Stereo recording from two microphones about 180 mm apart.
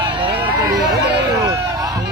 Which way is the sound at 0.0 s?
25° right (ahead or behind).